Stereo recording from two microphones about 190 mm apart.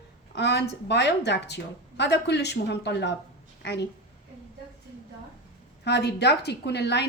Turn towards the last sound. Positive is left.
turn(degrees=60)  # may be behind; listen again after turning